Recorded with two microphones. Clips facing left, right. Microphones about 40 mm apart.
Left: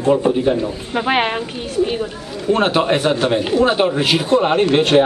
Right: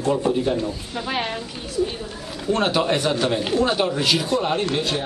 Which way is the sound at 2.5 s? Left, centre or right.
Left.